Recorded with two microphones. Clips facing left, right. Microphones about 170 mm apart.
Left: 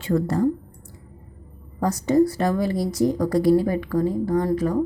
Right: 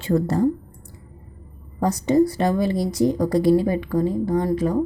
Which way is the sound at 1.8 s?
20° right (ahead or behind).